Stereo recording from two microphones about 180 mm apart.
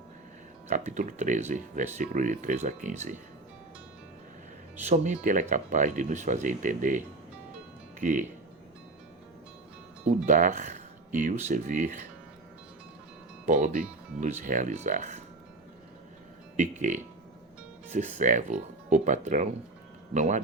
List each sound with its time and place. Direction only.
0.7 s speech: 40° right (ahead or behind)
4.9 s speech: 45° right (ahead or behind)
10.2 s speech: 45° right (ahead or behind)
13.5 s speech: 40° right (ahead or behind)
16.6 s speech: 45° right (ahead or behind)